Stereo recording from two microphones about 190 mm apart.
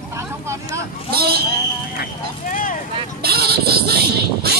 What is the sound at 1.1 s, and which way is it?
Speech, 55° right (ahead or behind).